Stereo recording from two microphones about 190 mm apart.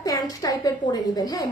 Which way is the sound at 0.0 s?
20° left (ahead or behind).